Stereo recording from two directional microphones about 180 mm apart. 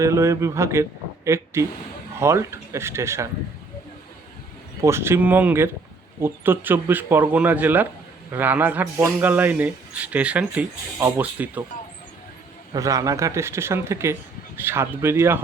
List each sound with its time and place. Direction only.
0.0 s a man's voice: 15° right (ahead or behind)
4.8 s a man's voice: 15° right (ahead or behind)
12.7 s a man's voice: 20° right (ahead or behind)